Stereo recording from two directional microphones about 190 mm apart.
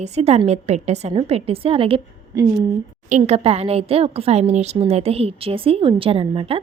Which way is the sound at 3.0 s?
35° right (ahead or behind).